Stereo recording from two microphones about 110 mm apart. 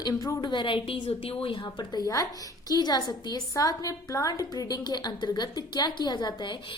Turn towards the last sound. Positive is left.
turn(degrees=40)  # may be behind; listen again after turning